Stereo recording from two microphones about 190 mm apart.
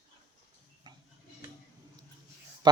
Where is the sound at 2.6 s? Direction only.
20° right (ahead or behind).